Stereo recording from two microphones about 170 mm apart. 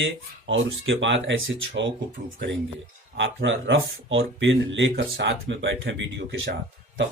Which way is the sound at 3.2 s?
90° right.